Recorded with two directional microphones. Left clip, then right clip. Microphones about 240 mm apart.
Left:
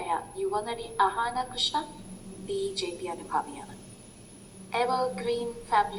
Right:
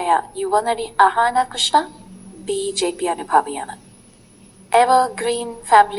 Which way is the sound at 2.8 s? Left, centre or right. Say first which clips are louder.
Right 13 dB; right.